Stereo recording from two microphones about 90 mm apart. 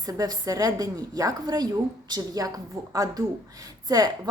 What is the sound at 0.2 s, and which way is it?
A woman's voice, 40° right (ahead or behind).